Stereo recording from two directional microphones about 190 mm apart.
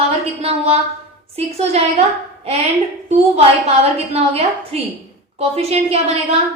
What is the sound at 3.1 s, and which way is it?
A woman's voice, 35° right (ahead or behind).